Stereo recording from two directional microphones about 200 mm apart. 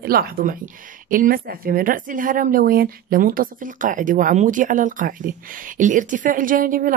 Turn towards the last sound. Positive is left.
turn(degrees=-45)  # may be behind; listen again after turning